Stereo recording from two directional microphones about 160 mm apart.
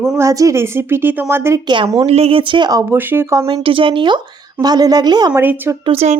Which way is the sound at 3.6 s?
35° right (ahead or behind).